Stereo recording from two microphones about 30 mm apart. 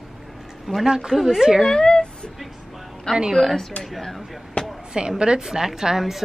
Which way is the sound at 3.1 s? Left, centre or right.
Left.